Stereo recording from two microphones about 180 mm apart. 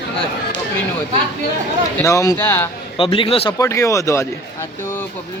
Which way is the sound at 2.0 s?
15° left (ahead or behind).